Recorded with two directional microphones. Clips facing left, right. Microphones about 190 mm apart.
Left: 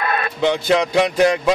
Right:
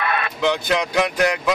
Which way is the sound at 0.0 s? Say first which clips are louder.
Left 2 dB; 40° left (ahead or behind).